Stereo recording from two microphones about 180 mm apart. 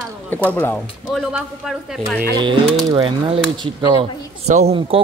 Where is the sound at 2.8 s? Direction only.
30° right (ahead or behind).